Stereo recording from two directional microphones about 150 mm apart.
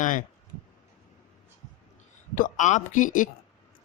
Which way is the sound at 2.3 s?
55° left (ahead or behind).